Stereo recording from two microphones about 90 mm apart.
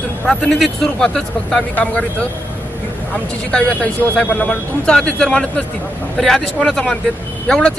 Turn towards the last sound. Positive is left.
turn(degrees=5)  # may be behind; listen again after turning